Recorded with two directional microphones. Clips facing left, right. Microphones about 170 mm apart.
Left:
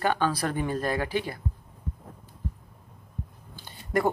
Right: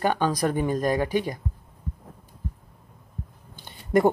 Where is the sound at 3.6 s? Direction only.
20° right (ahead or behind).